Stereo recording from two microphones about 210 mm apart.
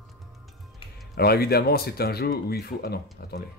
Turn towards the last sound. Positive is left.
turn(degrees=50)  # may be behind; listen again after turning